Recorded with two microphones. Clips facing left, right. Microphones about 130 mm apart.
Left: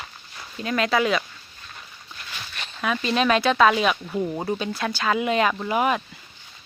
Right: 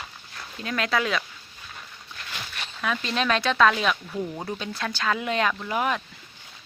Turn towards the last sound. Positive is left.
turn(degrees=10)  # may be behind; listen again after turning